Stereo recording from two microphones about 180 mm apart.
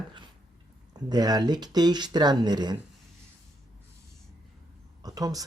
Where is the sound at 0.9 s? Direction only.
20° right (ahead or behind).